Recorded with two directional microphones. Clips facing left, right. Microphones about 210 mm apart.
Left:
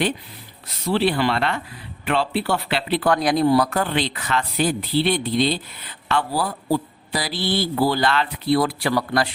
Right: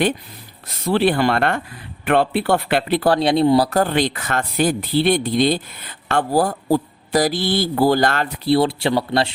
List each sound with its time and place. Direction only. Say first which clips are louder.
0.9 s speech: right 3 dB; 50° right (ahead or behind); by 3.7 s 25° right (ahead or behind)
3.7 s speech: right 5 dB; 40° right (ahead or behind)
8.4 s speech: right 4 dB; 30° right (ahead or behind)